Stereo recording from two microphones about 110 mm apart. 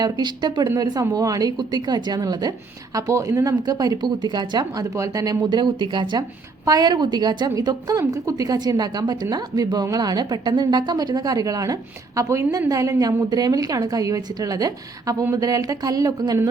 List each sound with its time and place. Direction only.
0.0 s a woman's voice: 40° right (ahead or behind)
0.7 s a woman's voice: 30° right (ahead or behind)